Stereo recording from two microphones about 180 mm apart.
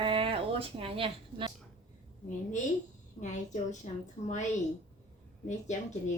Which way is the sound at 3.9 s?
40° left (ahead or behind).